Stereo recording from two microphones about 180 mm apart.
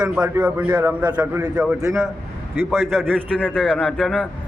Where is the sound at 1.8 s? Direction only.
20° right (ahead or behind).